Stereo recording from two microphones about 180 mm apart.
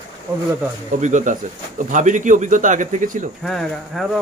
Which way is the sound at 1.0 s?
40° right (ahead or behind).